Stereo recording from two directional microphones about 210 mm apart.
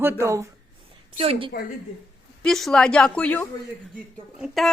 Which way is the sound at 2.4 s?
Centre (ahead or behind).